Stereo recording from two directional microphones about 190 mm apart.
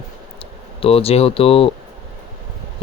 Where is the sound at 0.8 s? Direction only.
30° left (ahead or behind).